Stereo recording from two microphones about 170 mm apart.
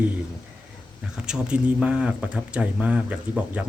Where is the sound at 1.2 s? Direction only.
5° right (ahead or behind).